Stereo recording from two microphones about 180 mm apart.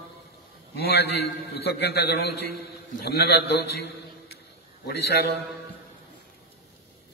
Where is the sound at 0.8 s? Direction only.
60° left (ahead or behind).